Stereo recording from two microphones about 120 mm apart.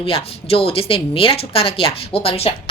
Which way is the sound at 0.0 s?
50° left (ahead or behind).